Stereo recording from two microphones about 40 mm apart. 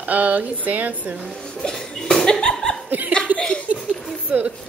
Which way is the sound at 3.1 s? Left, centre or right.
Right.